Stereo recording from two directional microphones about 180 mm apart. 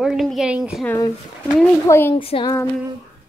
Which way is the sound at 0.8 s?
15° left (ahead or behind).